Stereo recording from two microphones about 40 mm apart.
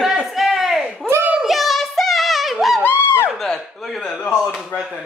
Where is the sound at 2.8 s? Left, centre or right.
Left.